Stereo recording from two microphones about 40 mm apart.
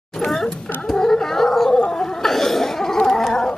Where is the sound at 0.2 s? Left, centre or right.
Centre.